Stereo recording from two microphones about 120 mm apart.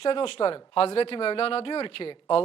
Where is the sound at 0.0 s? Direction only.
50° left (ahead or behind).